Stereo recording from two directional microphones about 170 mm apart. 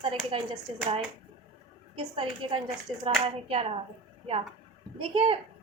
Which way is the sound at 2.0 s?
30° right (ahead or behind).